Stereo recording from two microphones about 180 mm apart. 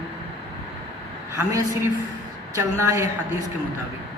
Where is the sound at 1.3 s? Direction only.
20° right (ahead or behind).